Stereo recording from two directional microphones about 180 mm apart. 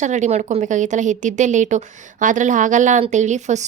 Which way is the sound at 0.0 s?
40° right (ahead or behind).